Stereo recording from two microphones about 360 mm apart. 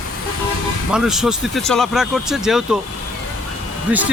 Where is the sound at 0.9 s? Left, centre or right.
Centre.